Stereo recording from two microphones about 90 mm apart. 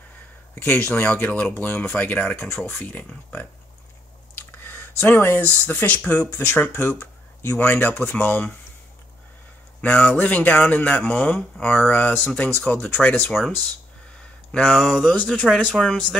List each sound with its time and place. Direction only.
0.6 s speech: 25° left (ahead or behind)
4.4 s a sound: 20° left (ahead or behind)
5.7 s speech: 20° left (ahead or behind)
9.8 s speech: 15° left (ahead or behind)
13.3 s speech: centre (ahead or behind)
14.6 s speech: 5° right (ahead or behind)
15.5 s speech: 10° left (ahead or behind)